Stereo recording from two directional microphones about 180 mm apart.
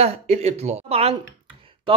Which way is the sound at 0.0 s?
35° right (ahead or behind).